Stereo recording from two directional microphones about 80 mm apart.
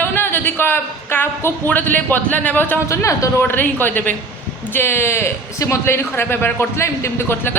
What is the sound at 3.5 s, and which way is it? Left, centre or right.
A man's voice, left.